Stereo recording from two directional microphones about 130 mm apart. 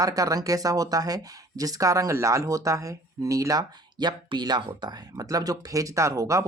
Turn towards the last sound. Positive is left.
turn(degrees=-25)  # may be behind; listen again after turning